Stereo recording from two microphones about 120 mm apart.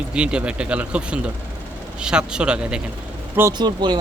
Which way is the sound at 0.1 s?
10° right (ahead or behind).